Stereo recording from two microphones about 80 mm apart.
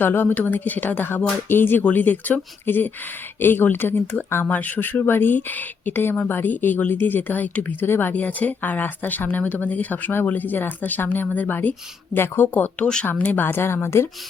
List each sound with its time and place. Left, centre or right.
0.0 s speech: left